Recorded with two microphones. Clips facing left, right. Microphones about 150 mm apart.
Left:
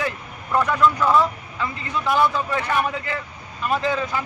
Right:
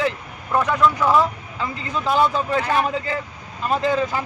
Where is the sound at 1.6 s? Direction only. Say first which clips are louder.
Right 1 dB; 25° right (ahead or behind).